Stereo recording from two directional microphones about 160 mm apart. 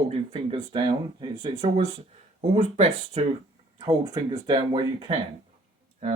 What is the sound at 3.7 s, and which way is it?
Speech, 30° right (ahead or behind).